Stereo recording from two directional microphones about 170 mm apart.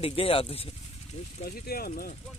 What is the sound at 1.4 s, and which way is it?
Speech, 65° left (ahead or behind).